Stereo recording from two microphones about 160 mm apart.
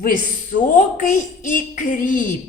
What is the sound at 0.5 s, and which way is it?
A woman's voice, 55° left (ahead or behind).